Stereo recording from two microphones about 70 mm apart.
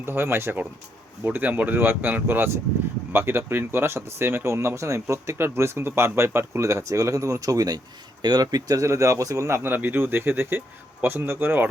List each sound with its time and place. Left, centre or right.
0.0 s speech: right
8.2 s speech: right
8.8 s speech: right
9.6 s speech: right